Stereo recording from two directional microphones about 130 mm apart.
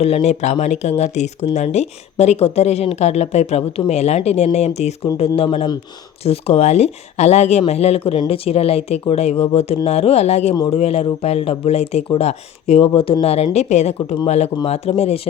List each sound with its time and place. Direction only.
0.0 s speech: 55° left (ahead or behind)